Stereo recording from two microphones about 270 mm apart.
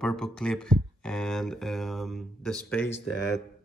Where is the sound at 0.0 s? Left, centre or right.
Centre.